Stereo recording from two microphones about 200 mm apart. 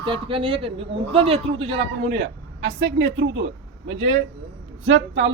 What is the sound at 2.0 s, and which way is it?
A man's voice, 60° right (ahead or behind).